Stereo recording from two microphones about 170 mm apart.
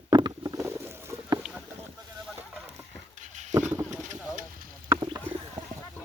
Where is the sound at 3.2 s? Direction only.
45° right (ahead or behind).